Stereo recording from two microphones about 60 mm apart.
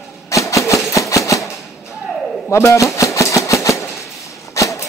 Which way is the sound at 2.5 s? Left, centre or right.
Left.